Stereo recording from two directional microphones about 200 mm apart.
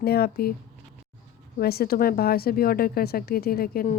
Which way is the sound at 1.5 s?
50° left (ahead or behind).